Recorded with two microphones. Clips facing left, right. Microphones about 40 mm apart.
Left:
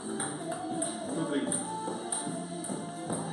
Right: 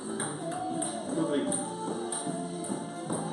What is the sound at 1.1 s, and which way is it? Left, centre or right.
Music, centre.